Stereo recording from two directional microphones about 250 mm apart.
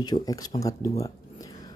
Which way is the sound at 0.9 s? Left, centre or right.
Centre.